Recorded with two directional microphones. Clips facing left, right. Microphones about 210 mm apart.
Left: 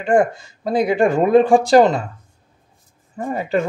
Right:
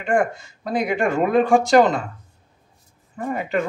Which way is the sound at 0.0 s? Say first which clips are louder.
Left 4 dB; 35° left (ahead or behind).